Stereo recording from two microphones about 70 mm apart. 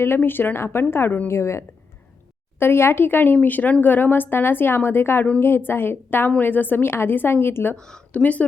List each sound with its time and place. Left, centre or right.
0.0 s a woman's voice: left
7.8 s speech: centre
8.2 s a woman's voice: left